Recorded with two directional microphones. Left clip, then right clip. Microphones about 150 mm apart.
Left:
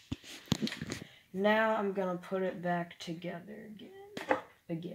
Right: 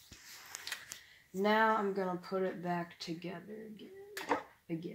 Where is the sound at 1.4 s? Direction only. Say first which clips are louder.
Left 1 dB; 50° left (ahead or behind).